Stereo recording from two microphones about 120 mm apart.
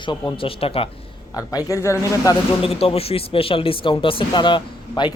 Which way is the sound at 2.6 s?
55° left (ahead or behind).